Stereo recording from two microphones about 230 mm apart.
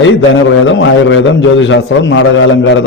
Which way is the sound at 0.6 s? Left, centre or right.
Left.